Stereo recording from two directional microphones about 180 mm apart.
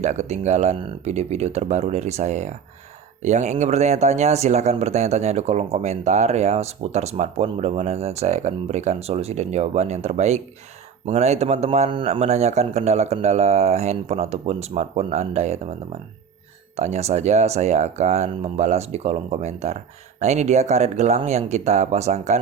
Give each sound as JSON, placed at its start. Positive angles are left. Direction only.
{"t": 0.0, "sound": "speech", "side_deg": -40}